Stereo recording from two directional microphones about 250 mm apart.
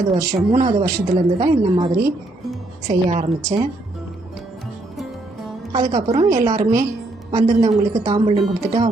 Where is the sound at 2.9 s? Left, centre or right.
Right.